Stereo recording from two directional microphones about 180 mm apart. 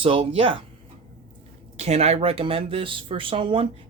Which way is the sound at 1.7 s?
35° right (ahead or behind).